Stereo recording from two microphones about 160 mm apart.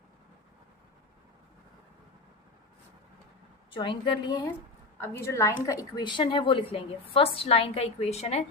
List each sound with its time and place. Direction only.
3.7 s a woman's voice: 30° left (ahead or behind)
4.9 s a woman's voice: 15° left (ahead or behind); by 8.4 s 40° left (ahead or behind)